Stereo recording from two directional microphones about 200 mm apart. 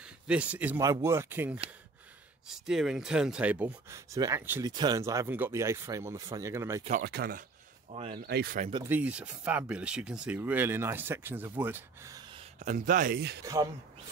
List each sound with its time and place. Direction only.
0.3 s speech: 5° right (ahead or behind)
7.0 s speech: 55° right (ahead or behind)
7.9 s speech: 30° right (ahead or behind)
8.3 s speech: 50° right (ahead or behind)
8.8 s speech: 10° right (ahead or behind)
12.5 s speech: 40° right (ahead or behind); by 13.4 s 55° right (ahead or behind)